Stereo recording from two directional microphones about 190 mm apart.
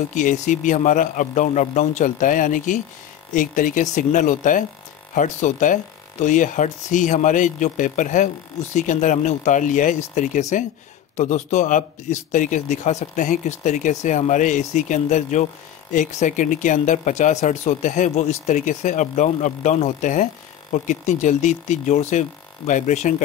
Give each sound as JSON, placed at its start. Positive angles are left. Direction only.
{"t": 0.1, "sound": "speech", "side_deg": 40}